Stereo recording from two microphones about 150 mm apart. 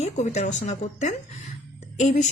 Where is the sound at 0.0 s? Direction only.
45° left (ahead or behind).